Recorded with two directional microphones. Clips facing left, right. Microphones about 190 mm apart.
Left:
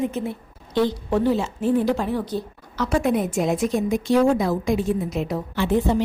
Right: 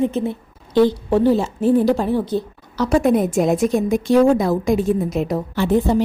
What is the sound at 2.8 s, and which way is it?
A woman's voice, 40° right (ahead or behind).